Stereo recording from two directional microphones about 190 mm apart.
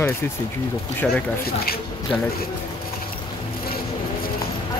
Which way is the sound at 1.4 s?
55° left (ahead or behind).